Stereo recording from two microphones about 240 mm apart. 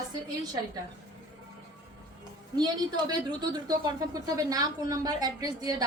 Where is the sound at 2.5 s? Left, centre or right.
Centre.